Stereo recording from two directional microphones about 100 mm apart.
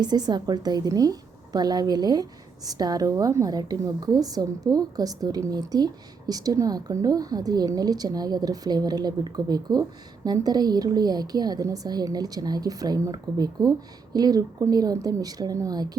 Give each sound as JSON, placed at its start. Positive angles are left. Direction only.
{"t": 0.0, "sound": "speech", "side_deg": -45}